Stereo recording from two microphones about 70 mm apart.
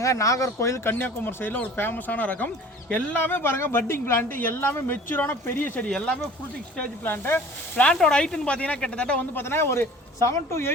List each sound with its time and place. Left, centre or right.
0.0 s speech: left
0.9 s a woman's voice: left
7.0 s a woman's voice: left
7.9 s speech: centre
9.3 s a woman's voice: left